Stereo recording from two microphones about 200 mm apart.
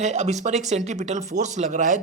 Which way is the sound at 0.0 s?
35° right (ahead or behind).